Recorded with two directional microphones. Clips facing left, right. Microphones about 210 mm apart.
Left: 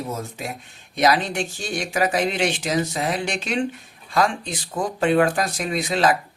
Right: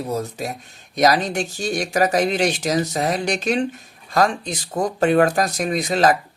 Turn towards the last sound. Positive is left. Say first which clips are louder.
# right 3 dB
turn(degrees=-40)  # may be behind; listen again after turning